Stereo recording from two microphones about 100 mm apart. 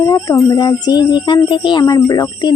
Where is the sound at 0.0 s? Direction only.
35° left (ahead or behind).